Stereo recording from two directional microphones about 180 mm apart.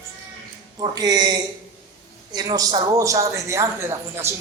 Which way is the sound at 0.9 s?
20° right (ahead or behind).